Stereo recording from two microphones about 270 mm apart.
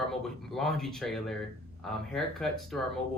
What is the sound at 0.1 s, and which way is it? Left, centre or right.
Speech, centre.